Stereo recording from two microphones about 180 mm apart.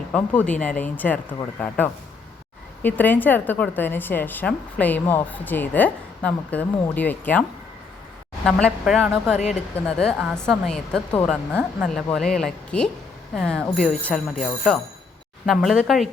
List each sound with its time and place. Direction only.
0.1 s a woman's voice: 5° left (ahead or behind)
8.4 s a woman's voice: 5° left (ahead or behind)
9.4 s speech: 40° left (ahead or behind)
9.7 s a woman's voice: 5° left (ahead or behind)